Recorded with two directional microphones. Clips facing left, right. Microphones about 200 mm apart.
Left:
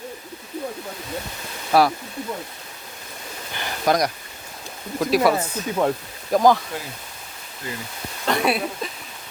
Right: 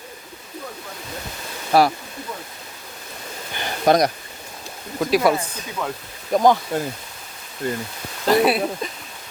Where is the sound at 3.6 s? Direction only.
25° right (ahead or behind).